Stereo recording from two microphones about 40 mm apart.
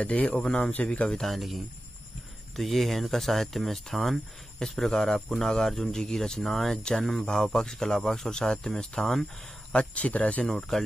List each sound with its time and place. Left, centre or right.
0.0 s speech: left
1.2 s speech: centre
9.7 s speech: left
10.4 s speech: centre